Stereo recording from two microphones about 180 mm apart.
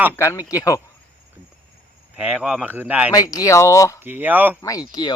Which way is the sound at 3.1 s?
20° left (ahead or behind).